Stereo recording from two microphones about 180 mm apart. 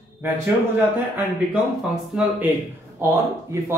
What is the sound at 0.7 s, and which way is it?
Speech, 10° right (ahead or behind).